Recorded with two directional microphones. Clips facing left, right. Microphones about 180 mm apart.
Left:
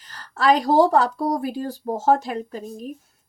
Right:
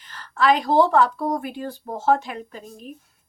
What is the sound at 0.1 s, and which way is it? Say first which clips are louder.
Speech: left 1 dB; 40° left (ahead or behind).